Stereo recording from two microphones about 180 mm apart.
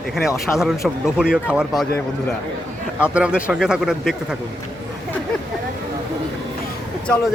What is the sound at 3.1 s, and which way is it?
Speech, 5° right (ahead or behind).